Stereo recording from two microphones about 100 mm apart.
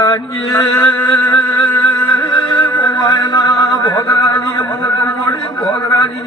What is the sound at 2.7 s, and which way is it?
Music, 50° left (ahead or behind).